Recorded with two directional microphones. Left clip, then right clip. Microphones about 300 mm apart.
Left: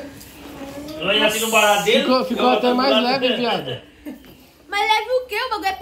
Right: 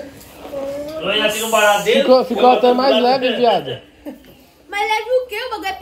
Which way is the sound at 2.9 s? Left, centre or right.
Centre.